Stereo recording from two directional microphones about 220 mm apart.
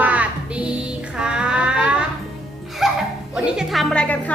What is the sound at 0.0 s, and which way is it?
Music, 5° right (ahead or behind).